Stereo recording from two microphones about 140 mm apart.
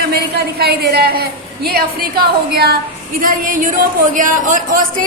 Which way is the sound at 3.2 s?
80° right.